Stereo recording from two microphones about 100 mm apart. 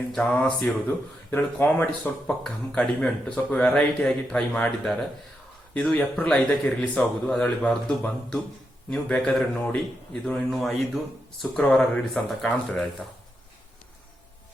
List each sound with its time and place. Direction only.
0.1 s speech: 10° left (ahead or behind)
11.5 s speech: 10° left (ahead or behind)